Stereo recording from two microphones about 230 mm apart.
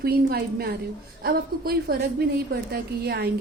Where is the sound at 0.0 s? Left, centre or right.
Right.